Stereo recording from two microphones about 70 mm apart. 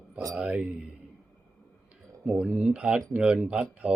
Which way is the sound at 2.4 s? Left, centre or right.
Centre.